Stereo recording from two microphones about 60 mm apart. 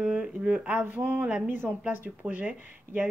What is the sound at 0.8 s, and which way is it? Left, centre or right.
Speech, right.